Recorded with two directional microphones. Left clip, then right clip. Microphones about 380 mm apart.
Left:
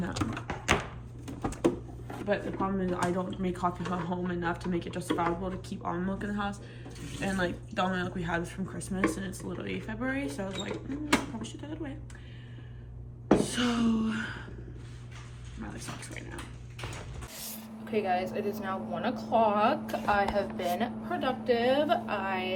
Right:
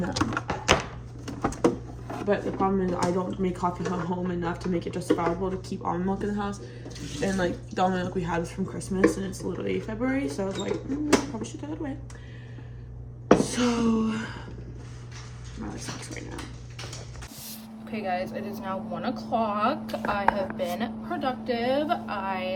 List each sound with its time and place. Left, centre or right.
0.0 s a sound: centre
2.2 s speech: centre
13.4 s speech: centre
15.6 s speech: centre
17.8 s speech: centre